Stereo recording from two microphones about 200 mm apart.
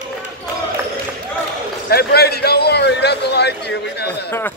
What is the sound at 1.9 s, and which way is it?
A man's voice, 50° left (ahead or behind).